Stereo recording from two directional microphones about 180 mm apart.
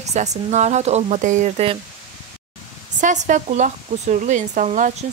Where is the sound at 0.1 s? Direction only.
40° right (ahead or behind).